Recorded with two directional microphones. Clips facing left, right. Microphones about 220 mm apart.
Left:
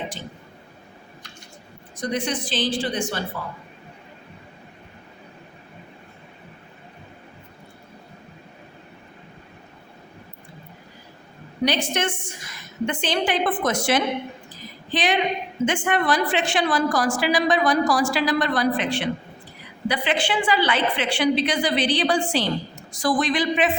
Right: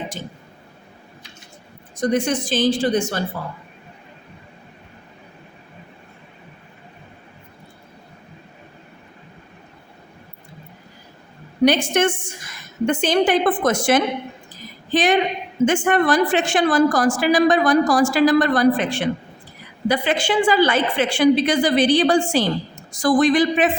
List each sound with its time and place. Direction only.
2.0 s a woman's voice: 45° right (ahead or behind)
11.6 s a woman's voice: 50° right (ahead or behind)